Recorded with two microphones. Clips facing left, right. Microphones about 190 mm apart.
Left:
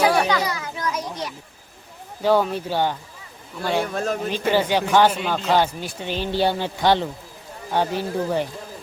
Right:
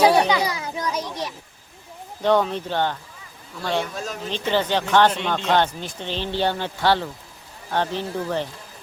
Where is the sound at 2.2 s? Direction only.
5° left (ahead or behind).